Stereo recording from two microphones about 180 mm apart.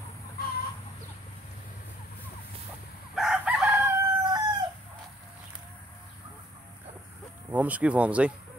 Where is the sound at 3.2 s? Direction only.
5° right (ahead or behind).